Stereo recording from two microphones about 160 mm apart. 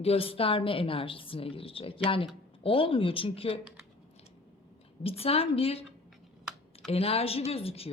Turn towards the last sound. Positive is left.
turn(degrees=35)  # may be behind; listen again after turning